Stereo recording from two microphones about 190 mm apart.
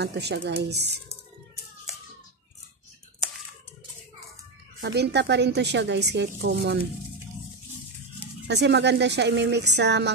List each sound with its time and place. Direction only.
0.0 s a woman's voice: 60° right (ahead or behind)
4.7 s a woman's voice: 65° right (ahead or behind)
8.5 s a woman's voice: 65° right (ahead or behind)